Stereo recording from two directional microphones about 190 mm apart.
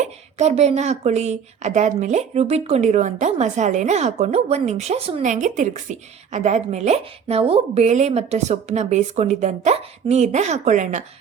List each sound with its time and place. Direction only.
0.0 s a woman's voice: 35° right (ahead or behind)